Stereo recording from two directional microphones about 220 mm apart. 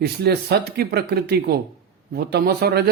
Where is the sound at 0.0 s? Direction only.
45° right (ahead or behind).